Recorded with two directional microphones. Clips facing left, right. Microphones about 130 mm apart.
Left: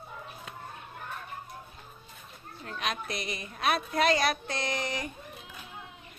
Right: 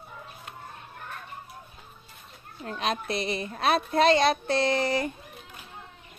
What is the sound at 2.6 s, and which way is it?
A woman's voice, 30° right (ahead or behind).